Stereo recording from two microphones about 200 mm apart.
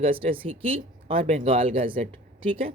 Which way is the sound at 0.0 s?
30° right (ahead or behind).